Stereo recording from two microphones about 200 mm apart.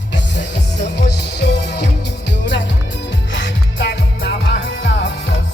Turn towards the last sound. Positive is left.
turn(degrees=60)  # may be behind; listen again after turning